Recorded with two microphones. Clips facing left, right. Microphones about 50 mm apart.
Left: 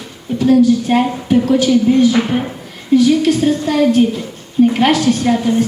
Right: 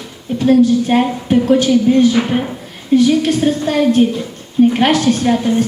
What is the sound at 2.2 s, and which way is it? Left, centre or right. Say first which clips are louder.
Speech: even; right.